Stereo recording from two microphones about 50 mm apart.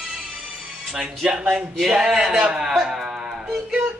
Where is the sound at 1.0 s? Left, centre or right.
Centre.